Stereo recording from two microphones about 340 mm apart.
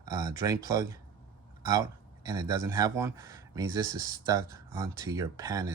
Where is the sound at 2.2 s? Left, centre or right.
Centre.